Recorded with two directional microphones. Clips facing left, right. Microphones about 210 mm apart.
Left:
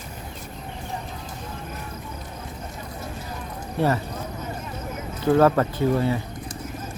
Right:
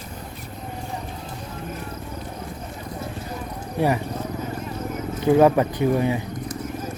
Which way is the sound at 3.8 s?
15° right (ahead or behind).